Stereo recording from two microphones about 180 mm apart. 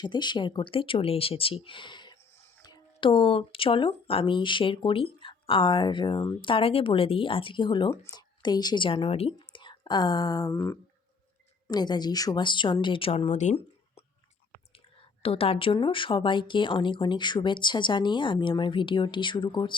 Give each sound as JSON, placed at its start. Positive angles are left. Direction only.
{"t": 0.0, "sound": "speech", "side_deg": 25}
{"t": 15.2, "sound": "speech", "side_deg": 30}